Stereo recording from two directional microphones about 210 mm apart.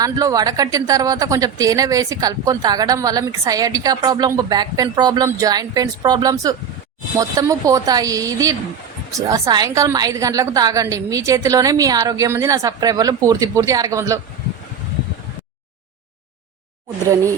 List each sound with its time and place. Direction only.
0.0 s a woman's voice: 15° right (ahead or behind)